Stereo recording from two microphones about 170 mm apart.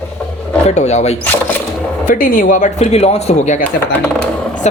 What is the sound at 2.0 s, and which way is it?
Speech, 55° left (ahead or behind).